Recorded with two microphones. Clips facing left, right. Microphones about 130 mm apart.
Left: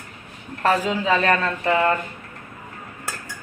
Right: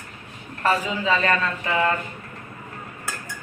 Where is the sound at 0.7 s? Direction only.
60° left (ahead or behind).